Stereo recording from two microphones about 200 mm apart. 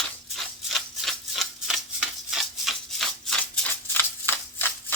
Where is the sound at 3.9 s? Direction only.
10° left (ahead or behind).